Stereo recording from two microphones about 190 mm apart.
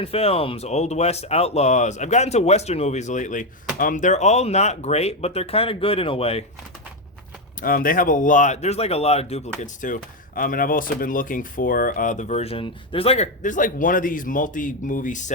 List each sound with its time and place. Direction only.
0.0 s speech: 30° left (ahead or behind)
7.6 s speech: 50° left (ahead or behind)